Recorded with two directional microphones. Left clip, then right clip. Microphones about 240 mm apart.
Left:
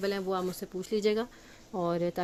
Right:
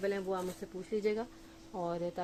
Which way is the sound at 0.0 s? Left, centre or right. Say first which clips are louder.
Left 4 dB; left.